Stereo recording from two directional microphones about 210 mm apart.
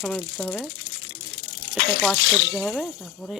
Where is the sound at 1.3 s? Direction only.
50° left (ahead or behind).